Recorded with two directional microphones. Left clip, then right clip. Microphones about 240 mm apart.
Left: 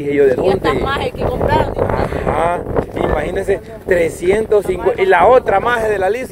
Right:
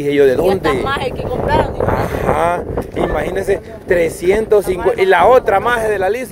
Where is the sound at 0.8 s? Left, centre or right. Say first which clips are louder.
Left 1 dB; centre.